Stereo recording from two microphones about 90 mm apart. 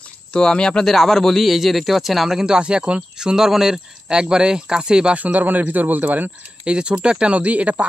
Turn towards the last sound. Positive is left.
turn(degrees=-15)  # may be behind; listen again after turning